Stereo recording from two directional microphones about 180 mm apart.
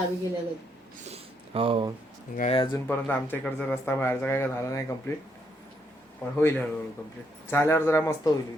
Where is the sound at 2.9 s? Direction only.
10° left (ahead or behind).